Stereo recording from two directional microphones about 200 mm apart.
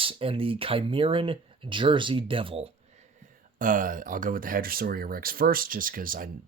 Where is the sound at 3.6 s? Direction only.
45° right (ahead or behind).